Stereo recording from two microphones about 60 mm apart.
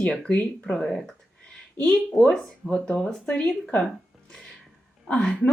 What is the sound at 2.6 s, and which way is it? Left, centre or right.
Speech, centre.